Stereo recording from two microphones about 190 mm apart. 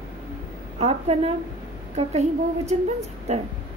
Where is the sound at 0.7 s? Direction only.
35° right (ahead or behind).